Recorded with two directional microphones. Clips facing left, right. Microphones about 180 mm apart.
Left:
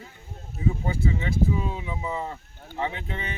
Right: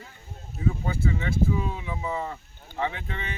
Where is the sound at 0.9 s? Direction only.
20° left (ahead or behind).